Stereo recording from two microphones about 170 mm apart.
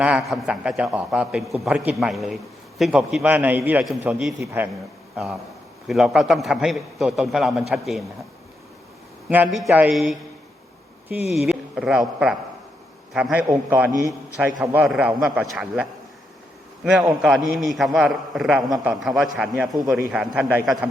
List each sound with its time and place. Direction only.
0.0 s a man's voice: 5° right (ahead or behind)
5.1 s a man's voice: 5° right (ahead or behind)
9.3 s a man's voice: 5° right (ahead or behind)